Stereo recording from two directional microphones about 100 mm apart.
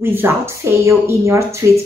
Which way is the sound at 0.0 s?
25° right (ahead or behind).